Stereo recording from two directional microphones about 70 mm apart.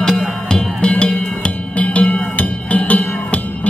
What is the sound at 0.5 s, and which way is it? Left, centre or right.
Music, centre.